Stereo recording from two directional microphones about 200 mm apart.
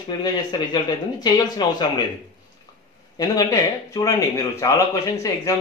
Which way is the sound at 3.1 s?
20° left (ahead or behind).